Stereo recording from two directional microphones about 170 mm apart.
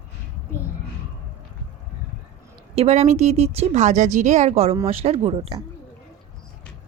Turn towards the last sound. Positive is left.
turn(degrees=-35)  # may be behind; listen again after turning